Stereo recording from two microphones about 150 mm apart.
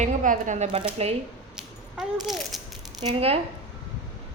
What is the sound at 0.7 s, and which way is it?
Speech, 40° right (ahead or behind).